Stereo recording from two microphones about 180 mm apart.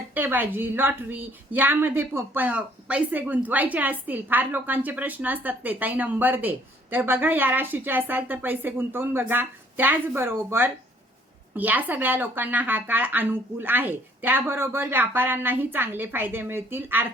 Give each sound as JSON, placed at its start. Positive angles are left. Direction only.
{"t": 0.1, "sound": "a woman's voice", "side_deg": -10}